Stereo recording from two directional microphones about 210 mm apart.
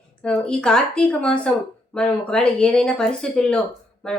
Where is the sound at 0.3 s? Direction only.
5° left (ahead or behind).